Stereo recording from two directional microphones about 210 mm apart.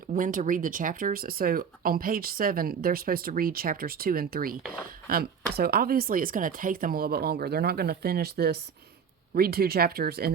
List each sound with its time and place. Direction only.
0.1 s speech: 40° right (ahead or behind)